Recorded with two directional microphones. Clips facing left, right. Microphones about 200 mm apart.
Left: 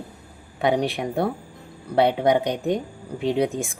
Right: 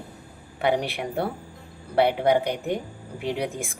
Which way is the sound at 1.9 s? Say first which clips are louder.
Left 1 dB; 20° left (ahead or behind).